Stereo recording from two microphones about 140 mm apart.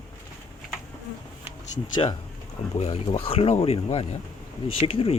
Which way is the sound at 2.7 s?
45° left (ahead or behind).